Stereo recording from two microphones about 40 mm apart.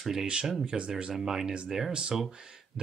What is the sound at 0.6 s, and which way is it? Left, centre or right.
Speech, right.